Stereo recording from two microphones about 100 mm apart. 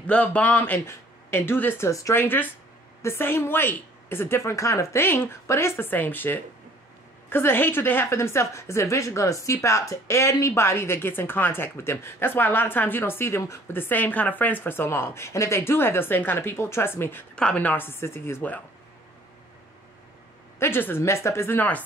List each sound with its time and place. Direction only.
0.0 s a man's voice: 10° left (ahead or behind)
1.9 s speech: 30° left (ahead or behind)
2.2 s a woman's voice: 20° left (ahead or behind)
17.4 s a woman's voice: 10° left (ahead or behind)
20.5 s a woman's voice: 25° left (ahead or behind)